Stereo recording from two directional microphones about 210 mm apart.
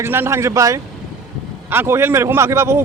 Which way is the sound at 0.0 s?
10° right (ahead or behind).